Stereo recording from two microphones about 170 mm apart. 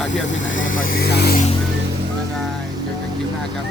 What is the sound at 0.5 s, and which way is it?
Speech, 50° left (ahead or behind).